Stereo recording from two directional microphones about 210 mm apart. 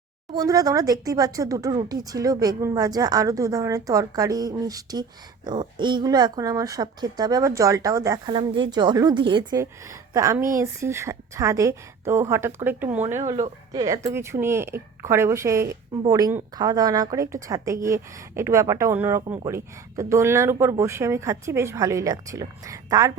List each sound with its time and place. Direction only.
0.3 s a woman's voice: 15° right (ahead or behind)